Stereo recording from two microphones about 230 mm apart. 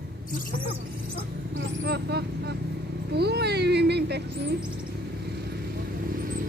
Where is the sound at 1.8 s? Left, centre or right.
Right.